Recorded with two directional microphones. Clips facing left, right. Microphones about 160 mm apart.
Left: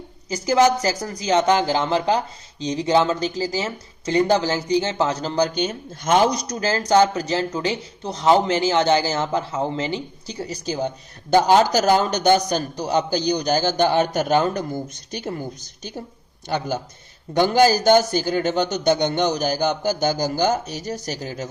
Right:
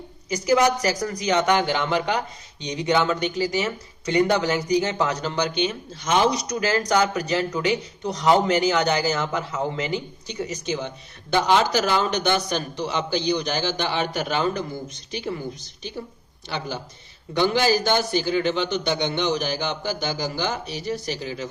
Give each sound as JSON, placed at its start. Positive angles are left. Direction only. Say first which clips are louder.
{"t": 0.3, "sound": "a man's voice", "louder": "left 2 dB", "side_deg": 30}
{"t": 6.6, "sound": "speech", "louder": "left 4 dB", "side_deg": 30}
{"t": 15.6, "sound": "a man's voice", "louder": "even", "side_deg": 45}